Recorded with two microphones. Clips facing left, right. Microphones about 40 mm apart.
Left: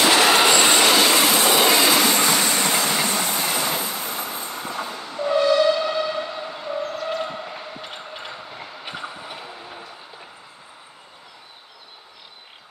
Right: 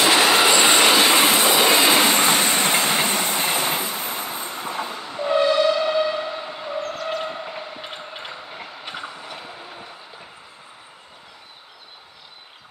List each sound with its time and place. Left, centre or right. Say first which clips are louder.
0.0 s train: even; centre; by 3.9 s right
3.9 s vehicle: right 1 dB; centre
6.8 s vehicle: even; centre
7.9 s train: even; centre
9.0 s train: left 1 dB; centre